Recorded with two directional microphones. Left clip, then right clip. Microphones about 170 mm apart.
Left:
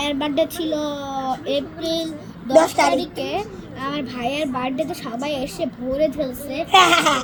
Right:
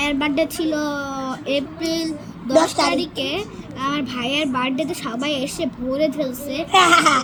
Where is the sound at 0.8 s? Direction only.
65° right (ahead or behind).